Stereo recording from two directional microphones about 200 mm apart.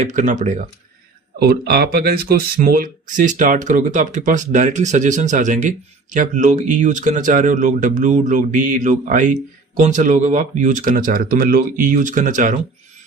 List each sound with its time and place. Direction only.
0.0 s speech: 40° right (ahead or behind)
1.4 s speech: 55° right (ahead or behind)